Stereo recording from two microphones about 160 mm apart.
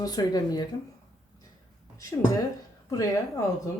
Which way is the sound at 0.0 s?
25° left (ahead or behind).